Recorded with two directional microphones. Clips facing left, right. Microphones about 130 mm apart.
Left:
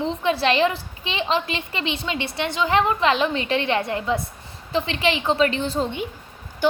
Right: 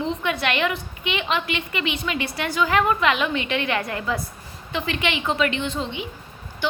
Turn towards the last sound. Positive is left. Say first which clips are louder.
# left 3 dB
turn(degrees=45)  # may be behind; listen again after turning